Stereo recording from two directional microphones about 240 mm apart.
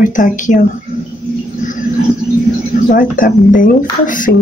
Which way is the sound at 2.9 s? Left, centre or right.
Left.